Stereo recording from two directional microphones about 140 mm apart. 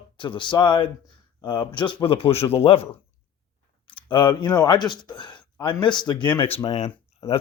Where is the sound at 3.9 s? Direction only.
35° left (ahead or behind).